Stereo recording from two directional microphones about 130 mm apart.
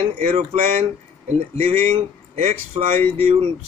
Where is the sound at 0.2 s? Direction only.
55° right (ahead or behind).